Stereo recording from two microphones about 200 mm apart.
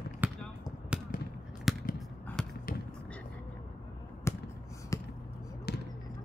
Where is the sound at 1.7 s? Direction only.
Centre (ahead or behind).